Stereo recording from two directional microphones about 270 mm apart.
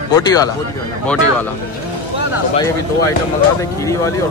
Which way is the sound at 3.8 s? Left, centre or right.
Centre.